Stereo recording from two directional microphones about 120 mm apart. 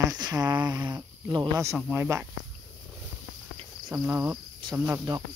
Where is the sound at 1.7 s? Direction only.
15° right (ahead or behind).